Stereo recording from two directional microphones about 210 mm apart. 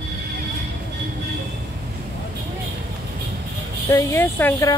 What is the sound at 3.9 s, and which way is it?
Speech, 10° left (ahead or behind).